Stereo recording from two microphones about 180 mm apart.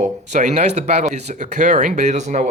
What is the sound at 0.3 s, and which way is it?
Speech, 40° right (ahead or behind).